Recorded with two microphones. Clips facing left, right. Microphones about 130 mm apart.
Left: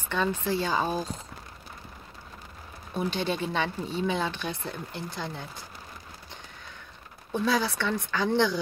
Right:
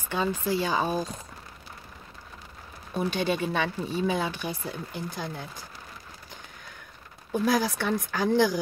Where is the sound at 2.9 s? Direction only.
10° right (ahead or behind).